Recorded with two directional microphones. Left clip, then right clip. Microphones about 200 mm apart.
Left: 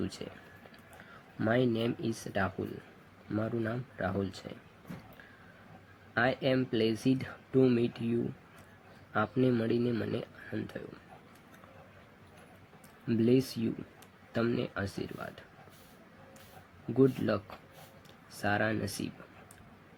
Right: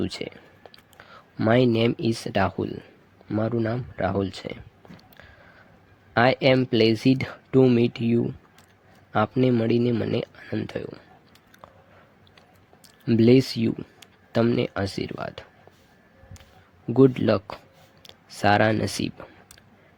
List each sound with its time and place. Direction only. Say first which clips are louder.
0.0 s speech: right 9 dB; 45° right (ahead or behind)
1.4 s speech: right 10 dB; 50° right (ahead or behind)
6.1 s speech: right 10 dB; 50° right (ahead or behind)
13.1 s speech: right 10 dB; 50° right (ahead or behind)
16.9 s speech: right 9 dB; 45° right (ahead or behind)